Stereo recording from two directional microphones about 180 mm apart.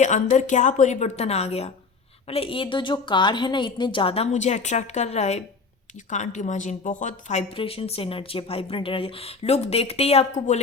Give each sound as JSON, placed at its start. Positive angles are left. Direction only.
{"t": 0.0, "sound": "speech", "side_deg": 40}